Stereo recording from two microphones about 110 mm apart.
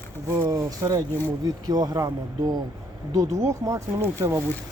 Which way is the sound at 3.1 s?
30° right (ahead or behind).